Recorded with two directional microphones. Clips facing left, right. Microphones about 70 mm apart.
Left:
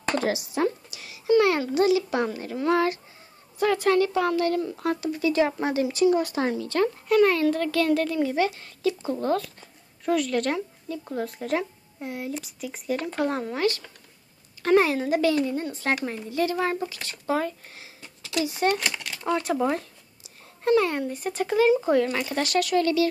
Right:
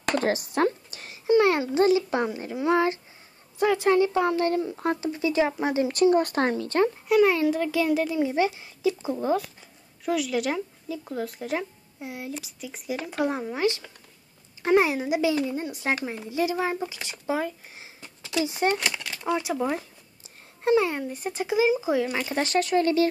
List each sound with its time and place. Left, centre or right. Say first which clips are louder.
0.2 s a sound: right 3 dB; right
1.3 s a child's voice: even; right
2.2 s a woman's voice: even; centre
6.0 s speech: right 2 dB; right
7.1 s a child's voice: left 1 dB; centre
17.7 s a sound: even; right
18.4 s a woman's voice: left 1 dB; right
18.8 s a child's voice: even; centre
20.6 s a child's voice: left 1 dB; centre
21.0 s speech: left 2 dB; centre
22.2 s a woman's voice: even; right